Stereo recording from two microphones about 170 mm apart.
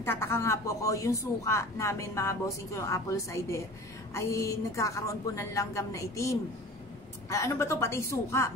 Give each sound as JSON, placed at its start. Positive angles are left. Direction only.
{"t": 0.0, "sound": "speech", "side_deg": 15}